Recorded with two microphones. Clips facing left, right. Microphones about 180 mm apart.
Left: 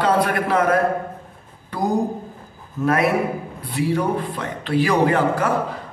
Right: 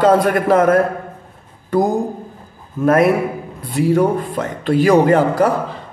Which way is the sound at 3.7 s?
45° right (ahead or behind).